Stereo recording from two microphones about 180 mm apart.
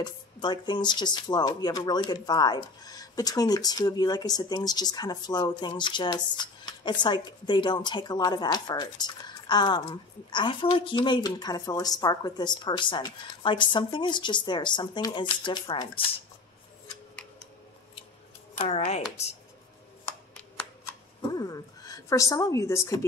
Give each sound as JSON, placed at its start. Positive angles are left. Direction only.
{"t": 0.0, "sound": "speech", "side_deg": 25}
{"t": 18.6, "sound": "speech", "side_deg": 35}
{"t": 21.3, "sound": "a woman's voice", "side_deg": 20}